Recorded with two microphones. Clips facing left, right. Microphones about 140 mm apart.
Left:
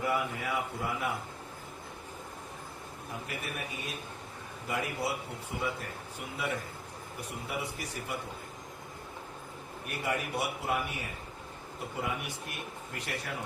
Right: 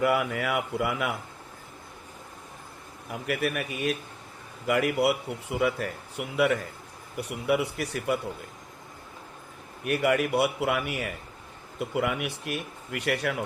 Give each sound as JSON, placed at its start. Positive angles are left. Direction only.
{"t": 0.0, "sound": "speech", "side_deg": -75}
{"t": 3.1, "sound": "speech", "side_deg": -80}
{"t": 9.8, "sound": "speech", "side_deg": -75}